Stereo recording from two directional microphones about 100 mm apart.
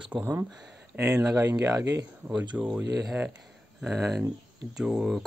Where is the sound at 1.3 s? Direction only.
30° right (ahead or behind).